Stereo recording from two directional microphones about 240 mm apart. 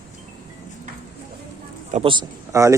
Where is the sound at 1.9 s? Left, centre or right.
Right.